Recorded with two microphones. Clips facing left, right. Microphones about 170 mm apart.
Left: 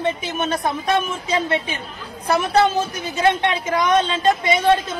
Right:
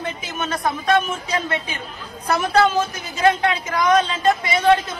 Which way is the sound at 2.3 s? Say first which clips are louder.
Even; 20° left (ahead or behind).